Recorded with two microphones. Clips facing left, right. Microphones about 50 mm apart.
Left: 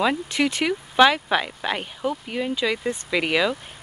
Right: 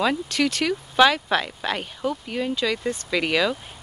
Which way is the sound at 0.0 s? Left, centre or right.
Centre.